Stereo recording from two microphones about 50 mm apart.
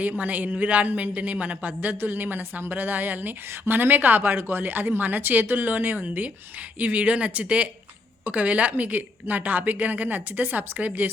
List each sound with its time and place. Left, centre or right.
0.0 s speech: right